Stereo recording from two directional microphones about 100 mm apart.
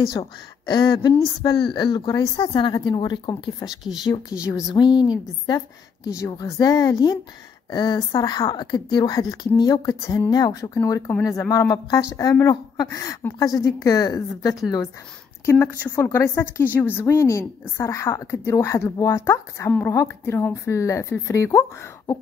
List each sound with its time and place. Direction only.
0.7 s a woman's voice: 45° left (ahead or behind)
3.8 s speech: 5° right (ahead or behind)
4.7 s a woman's voice: 45° left (ahead or behind)
6.0 s a woman's voice: 35° left (ahead or behind)